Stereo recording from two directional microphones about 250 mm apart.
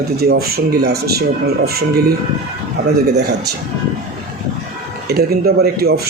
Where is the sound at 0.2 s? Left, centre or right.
Right.